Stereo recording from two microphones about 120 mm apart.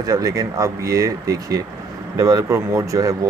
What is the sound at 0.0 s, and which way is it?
Speech, 30° right (ahead or behind).